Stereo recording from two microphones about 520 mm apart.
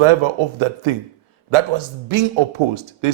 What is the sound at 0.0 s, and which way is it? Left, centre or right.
Speech, right.